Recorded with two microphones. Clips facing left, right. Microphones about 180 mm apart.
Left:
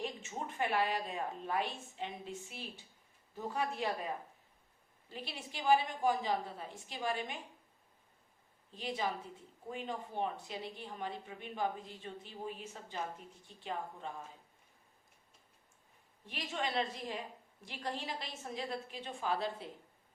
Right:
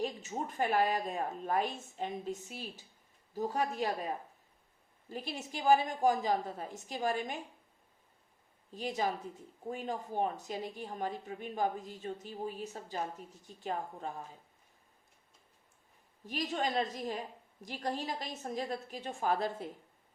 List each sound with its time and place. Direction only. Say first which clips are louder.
0.0 s a woman's voice: right 5 dB; 40° right (ahead or behind)
8.7 s a woman's voice: right 3 dB; 45° right (ahead or behind)
16.2 s a woman's voice: right 5 dB; 40° right (ahead or behind)